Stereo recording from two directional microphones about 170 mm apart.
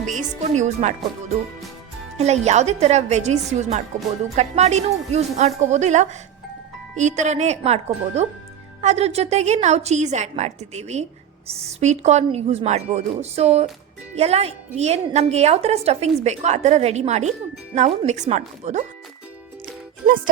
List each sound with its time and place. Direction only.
0.0 s speech: 45° right (ahead or behind)
2.1 s a woman's voice: 40° right (ahead or behind)